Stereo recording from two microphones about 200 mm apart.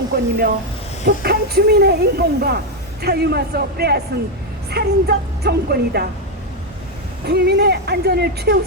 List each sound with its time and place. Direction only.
0.1 s a sound: 55° right (ahead or behind)
1.0 s speech: 55° right (ahead or behind)
7.3 s speech: 55° right (ahead or behind)